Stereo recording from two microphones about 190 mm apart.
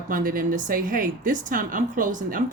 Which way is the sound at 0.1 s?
45° right (ahead or behind).